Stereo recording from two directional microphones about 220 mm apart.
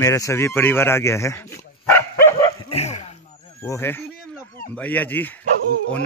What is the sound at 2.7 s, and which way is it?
Bow-wow, 30° left (ahead or behind).